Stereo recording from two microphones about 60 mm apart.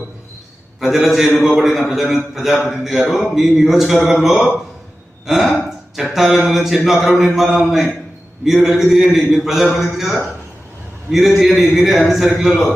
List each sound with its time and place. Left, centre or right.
0.8 s mantra: centre
5.2 s speech: centre
6.1 s mantra: centre